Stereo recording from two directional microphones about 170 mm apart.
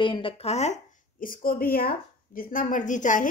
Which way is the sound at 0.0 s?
30° left (ahead or behind).